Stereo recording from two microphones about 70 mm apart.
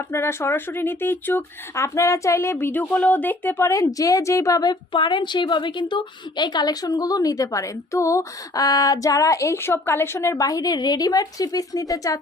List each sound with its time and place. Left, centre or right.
0.1 s speech: left
1.7 s a woman's voice: left
2.9 s speech: left
3.6 s a woman's voice: left
5.2 s a woman's voice: left
9.6 s speech: left
10.2 s a woman's voice: left